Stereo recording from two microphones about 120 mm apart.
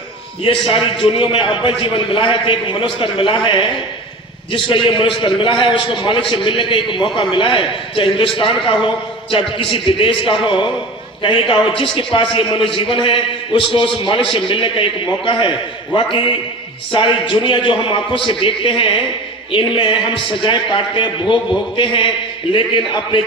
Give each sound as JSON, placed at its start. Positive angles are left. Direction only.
{"t": 0.7, "sound": "a man's voice", "side_deg": 45}